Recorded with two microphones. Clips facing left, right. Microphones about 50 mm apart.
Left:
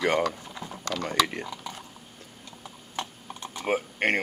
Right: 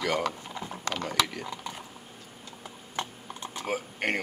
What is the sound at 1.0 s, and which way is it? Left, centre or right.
Speech, left.